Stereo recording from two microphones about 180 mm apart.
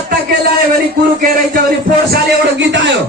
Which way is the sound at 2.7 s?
85° right.